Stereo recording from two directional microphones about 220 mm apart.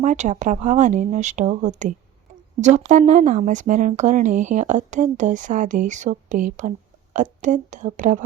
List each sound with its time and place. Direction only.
0.0 s speech: 35° right (ahead or behind)